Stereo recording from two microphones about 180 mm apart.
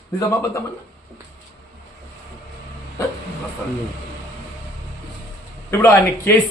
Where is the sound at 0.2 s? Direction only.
15° left (ahead or behind).